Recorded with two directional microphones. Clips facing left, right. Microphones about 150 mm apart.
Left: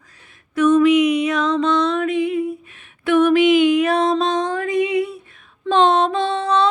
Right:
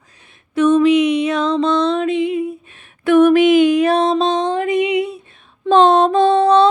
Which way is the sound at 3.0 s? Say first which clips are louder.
Right 3 dB; 45° right (ahead or behind).